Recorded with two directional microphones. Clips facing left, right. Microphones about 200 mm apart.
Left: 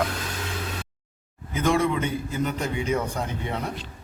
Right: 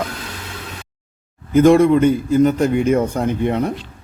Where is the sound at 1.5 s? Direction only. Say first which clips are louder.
Right 12 dB; 50° right (ahead or behind).